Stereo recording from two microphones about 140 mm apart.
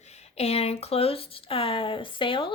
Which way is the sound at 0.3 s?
45° left (ahead or behind).